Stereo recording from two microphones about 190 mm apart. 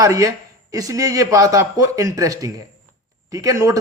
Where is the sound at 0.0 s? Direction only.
15° right (ahead or behind).